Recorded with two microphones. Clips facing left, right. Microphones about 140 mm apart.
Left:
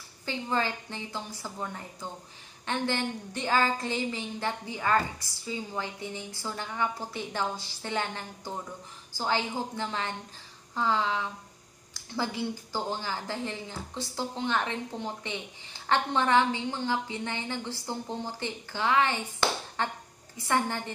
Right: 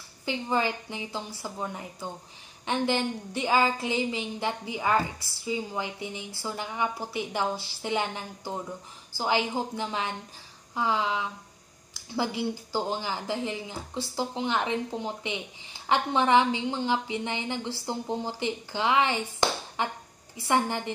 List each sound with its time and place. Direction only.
0.2 s a woman's voice: 15° right (ahead or behind)